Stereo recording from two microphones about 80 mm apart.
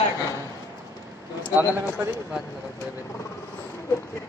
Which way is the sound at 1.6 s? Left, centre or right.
Right.